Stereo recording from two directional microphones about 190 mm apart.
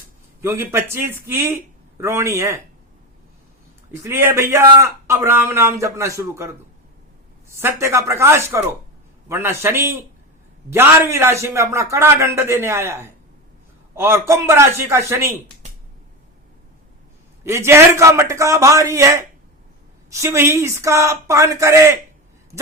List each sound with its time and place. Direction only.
0.4 s a man's voice: 15° right (ahead or behind)
4.0 s a man's voice: 10° right (ahead or behind)
7.6 s a man's voice: 15° right (ahead or behind)
17.4 s a man's voice: 15° right (ahead or behind)